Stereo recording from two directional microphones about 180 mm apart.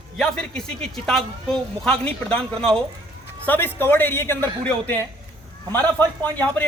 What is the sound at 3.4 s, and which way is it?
A man's voice, 10° left (ahead or behind).